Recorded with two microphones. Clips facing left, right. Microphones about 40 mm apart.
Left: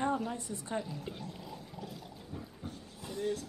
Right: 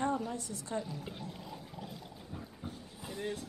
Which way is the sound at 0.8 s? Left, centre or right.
Centre.